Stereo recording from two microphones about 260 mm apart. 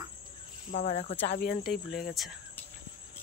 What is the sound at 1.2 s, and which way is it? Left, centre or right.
Speech, left.